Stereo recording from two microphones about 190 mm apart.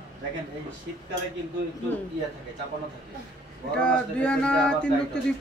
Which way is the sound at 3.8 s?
5° left (ahead or behind).